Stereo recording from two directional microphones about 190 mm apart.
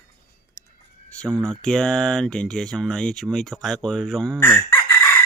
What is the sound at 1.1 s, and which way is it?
Speech, 5° left (ahead or behind).